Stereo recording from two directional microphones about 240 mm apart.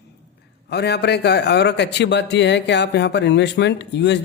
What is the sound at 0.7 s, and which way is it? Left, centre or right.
A man's voice, left.